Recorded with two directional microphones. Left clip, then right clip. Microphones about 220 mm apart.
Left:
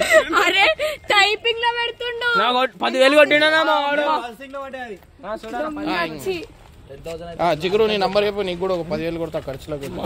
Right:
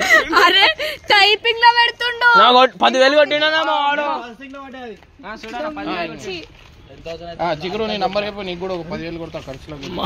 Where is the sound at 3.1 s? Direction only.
35° left (ahead or behind).